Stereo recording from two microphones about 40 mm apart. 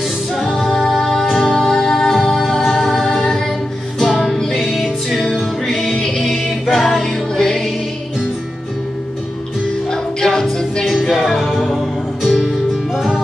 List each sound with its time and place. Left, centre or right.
0.7 s music: centre
1.6 s music: centre
7.0 s music: centre
9.8 s music: centre
10.9 s music: centre